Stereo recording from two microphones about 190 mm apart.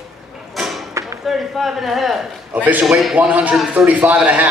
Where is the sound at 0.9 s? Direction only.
15° right (ahead or behind).